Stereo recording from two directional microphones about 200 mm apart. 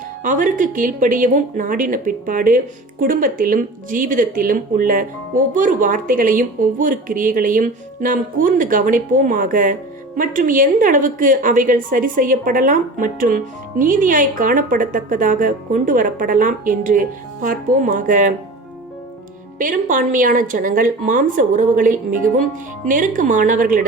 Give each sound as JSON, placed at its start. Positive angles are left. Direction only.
{"t": 0.2, "sound": "a woman's voice", "side_deg": -40}
{"t": 19.5, "sound": "a woman's voice", "side_deg": -40}